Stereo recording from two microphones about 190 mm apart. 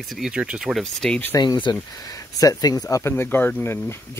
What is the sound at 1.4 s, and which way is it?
Speech, 25° left (ahead or behind).